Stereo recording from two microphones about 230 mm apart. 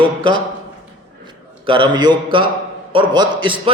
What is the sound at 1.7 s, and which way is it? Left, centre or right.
A man's voice, right.